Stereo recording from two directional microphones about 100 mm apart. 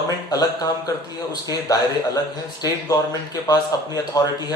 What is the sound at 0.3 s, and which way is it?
A man's voice, 40° left (ahead or behind).